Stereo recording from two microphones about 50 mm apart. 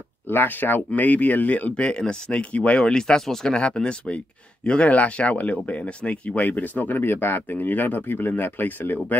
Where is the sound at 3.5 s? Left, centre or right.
Left.